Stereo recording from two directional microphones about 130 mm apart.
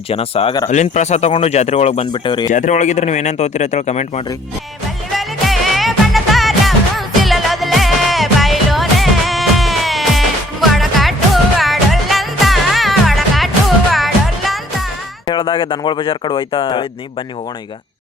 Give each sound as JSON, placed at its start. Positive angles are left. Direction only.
{"t": 0.1, "sound": "speech", "side_deg": 50}
{"t": 0.7, "sound": "speech", "side_deg": 65}
{"t": 2.1, "sound": "speech", "side_deg": 40}
{"t": 2.5, "sound": "speech", "side_deg": 70}
{"t": 5.1, "sound": "music", "side_deg": 0}
{"t": 15.3, "sound": "speech", "side_deg": 40}